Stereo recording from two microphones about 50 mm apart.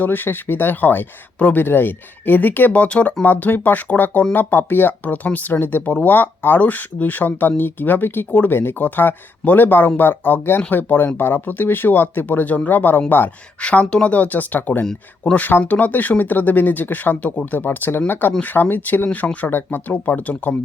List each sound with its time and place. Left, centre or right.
0.0 s speech: left
2.7 s speech: left
13.6 s speech: left
19.0 s speech: left
19.5 s speech: left
19.9 s speech: left